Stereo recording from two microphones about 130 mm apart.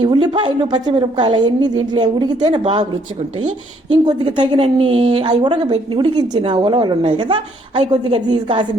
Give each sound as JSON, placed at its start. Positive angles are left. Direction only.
{"t": 0.0, "sound": "a woman's voice", "side_deg": -35}
{"t": 4.0, "sound": "a woman's voice", "side_deg": -35}
{"t": 5.4, "sound": "a woman's voice", "side_deg": -35}